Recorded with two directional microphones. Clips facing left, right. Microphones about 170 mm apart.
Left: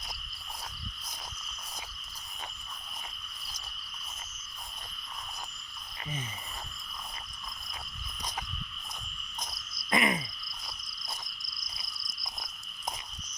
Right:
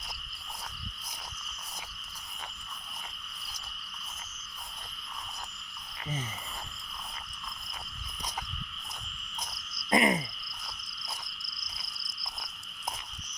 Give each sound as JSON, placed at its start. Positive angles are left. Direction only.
{"t": 9.9, "sound": "frog", "side_deg": -35}